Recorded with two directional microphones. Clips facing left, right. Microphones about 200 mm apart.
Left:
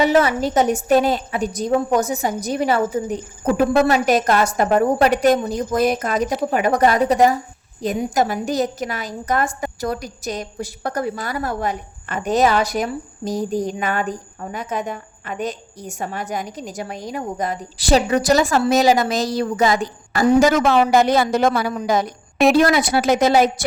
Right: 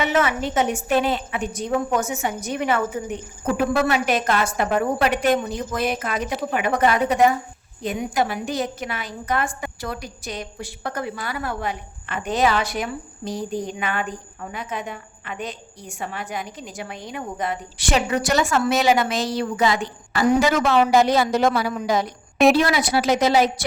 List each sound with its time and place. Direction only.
0.0 s a woman's voice: 35° left (ahead or behind)